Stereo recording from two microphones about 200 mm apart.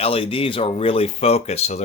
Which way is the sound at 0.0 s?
30° left (ahead or behind).